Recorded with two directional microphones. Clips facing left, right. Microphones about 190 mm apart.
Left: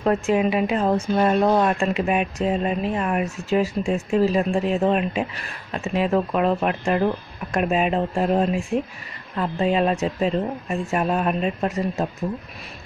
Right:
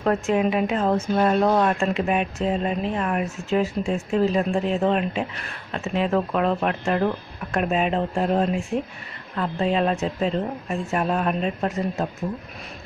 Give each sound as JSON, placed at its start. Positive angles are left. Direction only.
{"t": 0.0, "sound": "speech", "side_deg": 5}